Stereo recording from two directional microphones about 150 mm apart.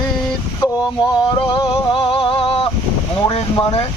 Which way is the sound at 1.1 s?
30° left (ahead or behind).